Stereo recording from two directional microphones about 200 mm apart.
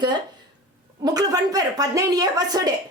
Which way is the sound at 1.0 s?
20° right (ahead or behind).